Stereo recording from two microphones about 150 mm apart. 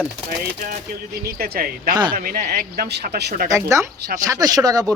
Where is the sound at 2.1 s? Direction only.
65° right (ahead or behind); by 3.5 s 85° right.